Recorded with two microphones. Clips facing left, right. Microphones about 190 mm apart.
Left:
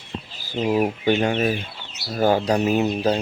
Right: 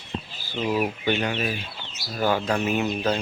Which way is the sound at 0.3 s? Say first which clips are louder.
Left 4 dB; 45° left (ahead or behind).